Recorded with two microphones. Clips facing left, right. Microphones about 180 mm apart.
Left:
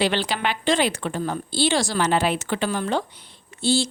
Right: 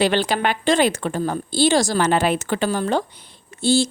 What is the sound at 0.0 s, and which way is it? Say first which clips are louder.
A woman's voice: right 4 dB; 45° right (ahead or behind).